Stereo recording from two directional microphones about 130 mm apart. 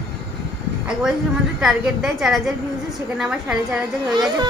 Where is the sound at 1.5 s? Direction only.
5° right (ahead or behind).